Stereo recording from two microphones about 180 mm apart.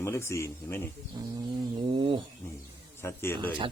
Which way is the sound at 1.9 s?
25° right (ahead or behind).